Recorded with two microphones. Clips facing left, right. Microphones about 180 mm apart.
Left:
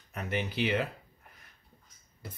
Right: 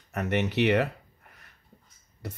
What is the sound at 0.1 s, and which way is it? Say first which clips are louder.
Speech: right 7 dB; 75° right (ahead or behind).